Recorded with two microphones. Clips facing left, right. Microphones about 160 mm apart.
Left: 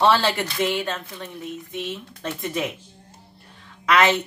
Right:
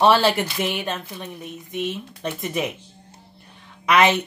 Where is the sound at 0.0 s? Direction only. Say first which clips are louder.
Right 2 dB; 15° right (ahead or behind).